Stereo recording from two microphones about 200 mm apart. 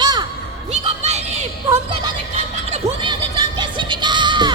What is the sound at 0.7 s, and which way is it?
Crowd, 35° right (ahead or behind).